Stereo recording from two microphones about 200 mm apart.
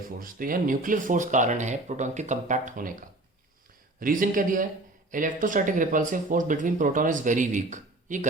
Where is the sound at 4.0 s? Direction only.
45° right (ahead or behind).